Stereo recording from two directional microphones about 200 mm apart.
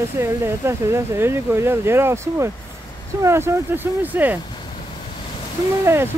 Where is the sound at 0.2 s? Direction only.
15° right (ahead or behind).